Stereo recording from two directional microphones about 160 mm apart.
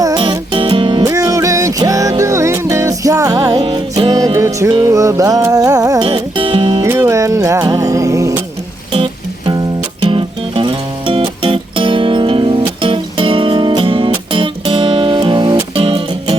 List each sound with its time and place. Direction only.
0.0 s music: 25° right (ahead or behind)
1.1 s music: 20° right (ahead or behind)
6.1 s music: 35° right (ahead or behind)
6.8 s music: 15° right (ahead or behind)
10.1 s music: 35° right (ahead or behind)